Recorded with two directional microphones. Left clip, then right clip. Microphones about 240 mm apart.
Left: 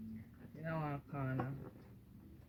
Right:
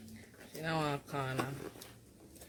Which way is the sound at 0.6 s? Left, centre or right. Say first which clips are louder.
Right 8 dB; right.